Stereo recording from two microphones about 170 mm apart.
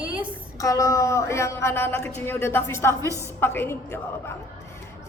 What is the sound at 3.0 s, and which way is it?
Speech, 20° right (ahead or behind).